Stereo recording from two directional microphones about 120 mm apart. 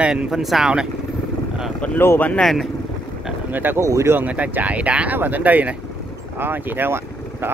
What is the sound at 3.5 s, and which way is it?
Speech, 15° right (ahead or behind).